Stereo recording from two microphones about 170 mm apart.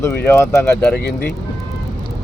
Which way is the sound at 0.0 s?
10° left (ahead or behind).